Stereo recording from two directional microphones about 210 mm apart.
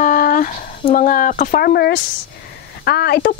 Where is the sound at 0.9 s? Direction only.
40° left (ahead or behind).